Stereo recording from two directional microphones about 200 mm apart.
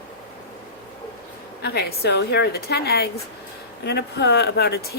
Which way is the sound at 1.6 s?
55° left (ahead or behind).